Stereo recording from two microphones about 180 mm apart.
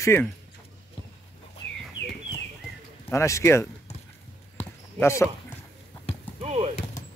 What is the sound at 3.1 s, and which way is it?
Speech, 15° left (ahead or behind).